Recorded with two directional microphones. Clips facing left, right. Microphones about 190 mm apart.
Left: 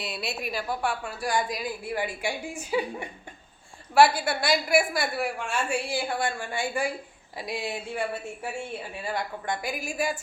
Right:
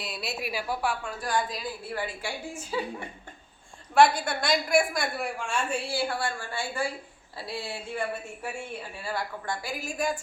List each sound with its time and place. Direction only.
0.0 s a woman's voice: centre (ahead or behind)
1.2 s a woman's voice: 10° left (ahead or behind)
9.0 s a woman's voice: 20° left (ahead or behind)